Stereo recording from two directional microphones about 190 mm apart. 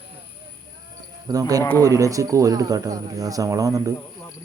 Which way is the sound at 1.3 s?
20° right (ahead or behind).